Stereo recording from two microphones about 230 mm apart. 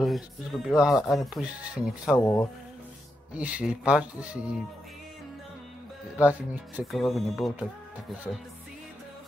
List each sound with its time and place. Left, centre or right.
0.0 s speech: centre
2.1 s speech: centre
3.3 s speech: centre
6.2 s speech: centre